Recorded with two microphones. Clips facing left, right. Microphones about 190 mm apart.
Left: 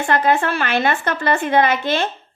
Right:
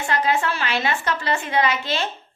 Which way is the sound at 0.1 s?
55° left (ahead or behind).